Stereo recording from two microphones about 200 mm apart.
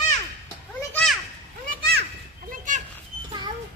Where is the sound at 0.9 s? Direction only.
5° left (ahead or behind).